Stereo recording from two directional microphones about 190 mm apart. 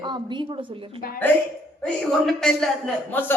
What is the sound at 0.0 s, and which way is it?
A woman's voice, 25° right (ahead or behind).